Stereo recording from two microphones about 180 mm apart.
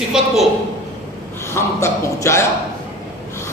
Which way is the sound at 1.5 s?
15° left (ahead or behind).